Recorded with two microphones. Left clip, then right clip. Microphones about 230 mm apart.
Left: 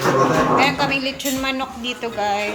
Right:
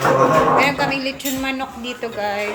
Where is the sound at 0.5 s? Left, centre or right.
Centre.